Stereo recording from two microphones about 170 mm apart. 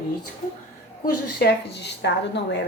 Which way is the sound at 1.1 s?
70° left (ahead or behind).